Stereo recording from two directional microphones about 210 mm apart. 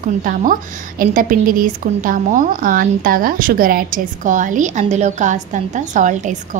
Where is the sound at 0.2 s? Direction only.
40° right (ahead or behind).